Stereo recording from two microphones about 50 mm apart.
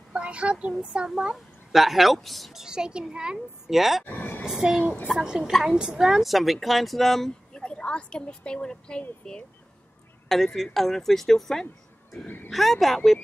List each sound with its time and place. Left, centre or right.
0.1 s a woman's voice: right; by 2.6 s centre
2.6 s a child's voice: centre
3.7 s speech: centre
4.0 s speech: left
4.5 s a child's voice: centre
10.2 s speech: centre